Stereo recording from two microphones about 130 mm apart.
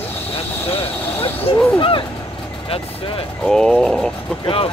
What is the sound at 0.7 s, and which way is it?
Vehicle, 45° left (ahead or behind).